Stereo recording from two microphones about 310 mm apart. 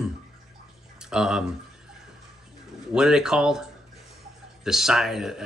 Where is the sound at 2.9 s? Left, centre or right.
Centre.